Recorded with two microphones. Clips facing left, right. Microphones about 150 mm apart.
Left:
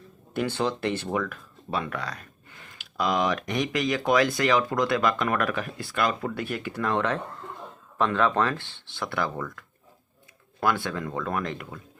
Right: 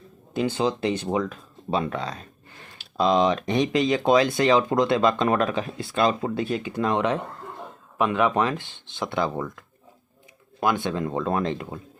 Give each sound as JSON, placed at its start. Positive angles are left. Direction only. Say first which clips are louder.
{"t": 0.3, "sound": "speech", "louder": "right 3 dB", "side_deg": -15}